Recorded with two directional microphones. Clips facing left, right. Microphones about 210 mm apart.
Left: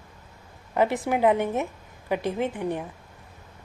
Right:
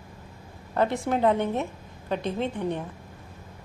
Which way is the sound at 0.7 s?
15° left (ahead or behind).